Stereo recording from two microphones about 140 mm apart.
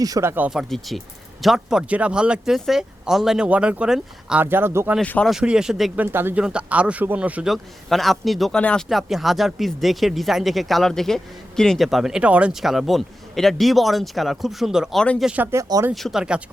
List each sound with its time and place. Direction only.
0.0 s speech: 20° right (ahead or behind)
0.7 s speech: centre (ahead or behind); by 4.9 s 15° right (ahead or behind)
4.9 s speech: 5° left (ahead or behind)
5.3 s a man's voice: 5° right (ahead or behind)
6.0 s a man's voice: 15° right (ahead or behind)
15.9 s a man's voice: centre (ahead or behind)